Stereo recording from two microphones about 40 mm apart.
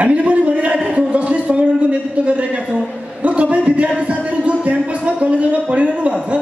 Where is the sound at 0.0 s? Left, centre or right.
Right.